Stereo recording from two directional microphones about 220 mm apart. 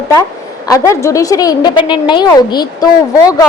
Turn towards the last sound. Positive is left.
turn(degrees=20)  # may be behind; listen again after turning